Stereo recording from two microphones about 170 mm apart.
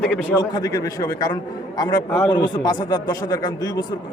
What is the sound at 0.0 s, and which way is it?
Speech, 5° left (ahead or behind).